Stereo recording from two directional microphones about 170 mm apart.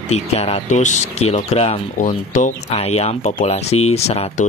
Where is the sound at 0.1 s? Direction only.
40° left (ahead or behind).